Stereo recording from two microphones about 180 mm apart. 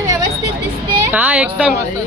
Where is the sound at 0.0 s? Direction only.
20° right (ahead or behind).